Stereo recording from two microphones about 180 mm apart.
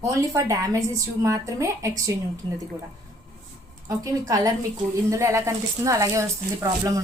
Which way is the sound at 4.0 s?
20° right (ahead or behind).